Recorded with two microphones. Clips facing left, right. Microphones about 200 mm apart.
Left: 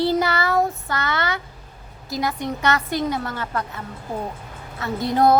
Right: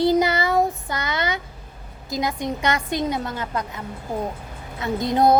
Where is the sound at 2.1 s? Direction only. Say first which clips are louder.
Even; 20° right (ahead or behind).